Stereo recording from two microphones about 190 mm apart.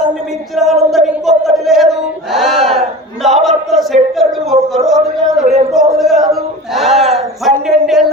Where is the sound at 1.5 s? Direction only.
Centre (ahead or behind).